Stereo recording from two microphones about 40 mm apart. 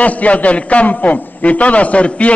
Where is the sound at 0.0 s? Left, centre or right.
Left.